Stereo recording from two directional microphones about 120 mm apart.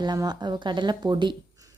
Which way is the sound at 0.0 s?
35° right (ahead or behind).